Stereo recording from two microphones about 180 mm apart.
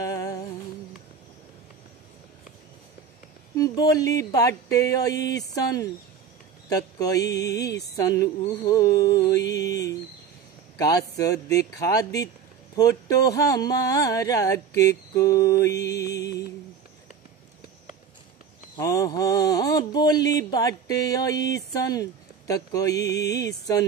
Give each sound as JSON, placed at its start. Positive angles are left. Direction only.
{"t": 0.0, "sound": "music", "side_deg": 20}
{"t": 3.5, "sound": "speech", "side_deg": 20}
{"t": 18.8, "sound": "speech", "side_deg": 20}